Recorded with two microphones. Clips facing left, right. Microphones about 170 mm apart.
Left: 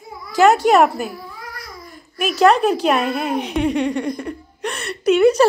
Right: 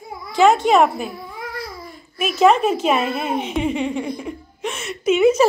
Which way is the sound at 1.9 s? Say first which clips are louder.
Left 3 dB; centre (ahead or behind).